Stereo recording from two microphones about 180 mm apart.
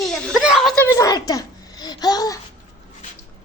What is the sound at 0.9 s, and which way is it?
A child's voice, 20° left (ahead or behind).